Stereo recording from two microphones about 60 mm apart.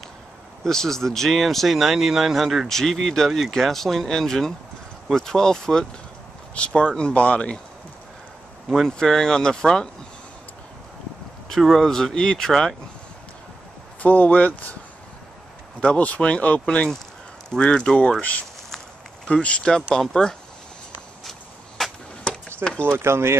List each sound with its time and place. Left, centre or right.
0.7 s speech: centre
6.5 s speech: centre
8.7 s speech: centre
11.4 s speech: centre
14.0 s speech: left
15.8 s speech: left
19.2 s speech: centre
21.3 s a sound: centre
22.2 s chop: centre
22.8 s speech: right